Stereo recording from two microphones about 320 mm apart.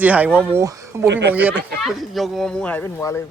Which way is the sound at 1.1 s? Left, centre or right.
Right.